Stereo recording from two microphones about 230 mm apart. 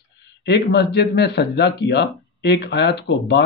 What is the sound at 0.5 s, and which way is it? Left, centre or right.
Speech, left.